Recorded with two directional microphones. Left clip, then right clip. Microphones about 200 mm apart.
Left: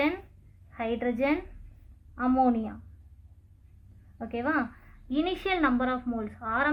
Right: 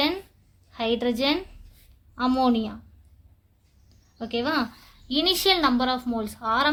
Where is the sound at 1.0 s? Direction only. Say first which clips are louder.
Right 1 dB; 75° right (ahead or behind).